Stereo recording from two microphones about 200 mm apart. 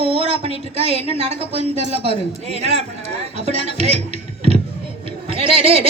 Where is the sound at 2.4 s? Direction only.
35° right (ahead or behind).